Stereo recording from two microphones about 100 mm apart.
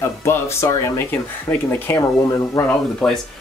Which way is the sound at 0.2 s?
25° left (ahead or behind).